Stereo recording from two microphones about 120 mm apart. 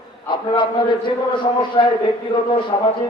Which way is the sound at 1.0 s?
40° left (ahead or behind).